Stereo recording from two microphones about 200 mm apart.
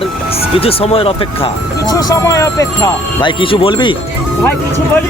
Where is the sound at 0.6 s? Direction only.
30° left (ahead or behind).